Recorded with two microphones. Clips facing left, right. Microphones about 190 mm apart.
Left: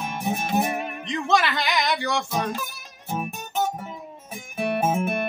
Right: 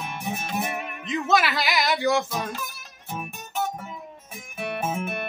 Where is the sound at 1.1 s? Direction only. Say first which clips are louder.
Even; 5° right (ahead or behind).